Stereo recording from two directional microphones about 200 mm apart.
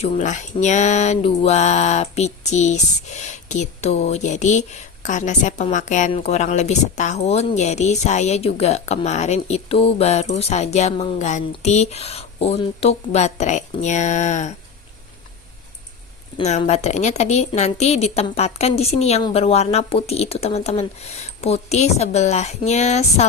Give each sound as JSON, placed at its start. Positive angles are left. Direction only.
{"t": 0.0, "sound": "speech", "side_deg": 35}
{"t": 16.4, "sound": "speech", "side_deg": 35}